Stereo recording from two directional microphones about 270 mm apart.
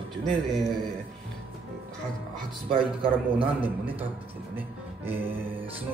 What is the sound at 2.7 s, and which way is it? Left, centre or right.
Speech, centre.